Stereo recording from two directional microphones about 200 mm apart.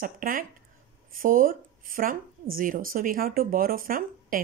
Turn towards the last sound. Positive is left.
turn(degrees=-45)  # may be behind; listen again after turning